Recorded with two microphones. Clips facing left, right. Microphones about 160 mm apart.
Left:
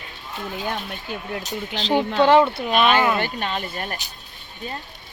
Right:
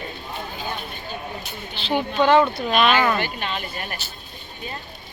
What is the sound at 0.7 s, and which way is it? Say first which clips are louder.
Speech: left 2 dB; 80° left.